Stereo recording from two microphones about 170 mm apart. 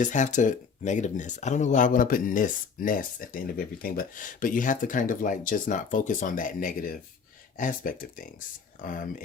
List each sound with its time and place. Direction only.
0.0 s speech: 45° left (ahead or behind)